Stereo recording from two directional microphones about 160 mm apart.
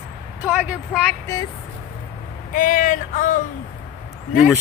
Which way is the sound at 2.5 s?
55° left (ahead or behind).